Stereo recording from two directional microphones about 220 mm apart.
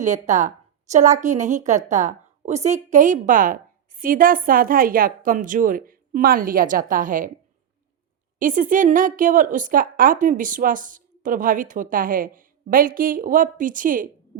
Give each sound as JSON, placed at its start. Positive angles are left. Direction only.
{"t": 0.0, "sound": "a woman's voice", "side_deg": -35}
{"t": 8.4, "sound": "a woman's voice", "side_deg": -35}